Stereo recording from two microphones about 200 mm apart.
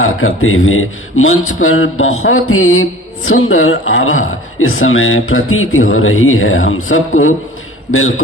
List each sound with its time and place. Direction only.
0.0 s a man's voice: 90° left